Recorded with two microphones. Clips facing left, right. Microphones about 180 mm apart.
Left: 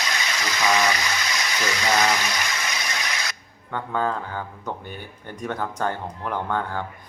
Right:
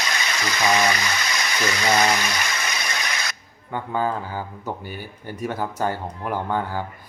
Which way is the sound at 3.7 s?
10° right (ahead or behind).